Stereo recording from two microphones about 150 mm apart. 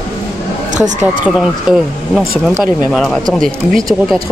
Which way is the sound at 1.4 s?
5° right (ahead or behind).